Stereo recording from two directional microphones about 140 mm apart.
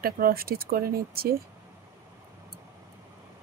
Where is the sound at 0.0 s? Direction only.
90° right.